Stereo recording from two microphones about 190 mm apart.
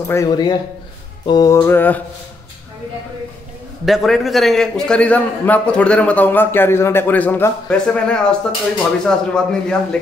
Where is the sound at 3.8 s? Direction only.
Centre (ahead or behind).